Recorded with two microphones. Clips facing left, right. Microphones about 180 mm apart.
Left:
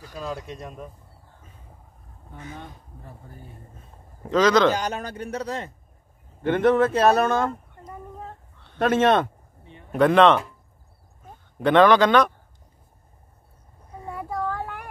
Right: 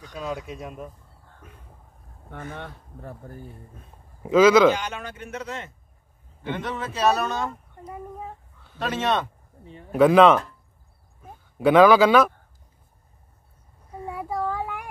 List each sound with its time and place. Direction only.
0.0 s speech: 5° left (ahead or behind)
2.3 s speech: 60° right (ahead or behind)
4.2 s a man's voice: 5° right (ahead or behind)
4.7 s speech: 40° left (ahead or behind)
6.4 s speech: 55° left (ahead or behind)
7.8 s a sound: 10° right (ahead or behind)
8.7 s speech: 55° left (ahead or behind)
9.7 s speech: 35° right (ahead or behind)
9.9 s speech: 5° right (ahead or behind)
14.1 s child singing: 10° right (ahead or behind)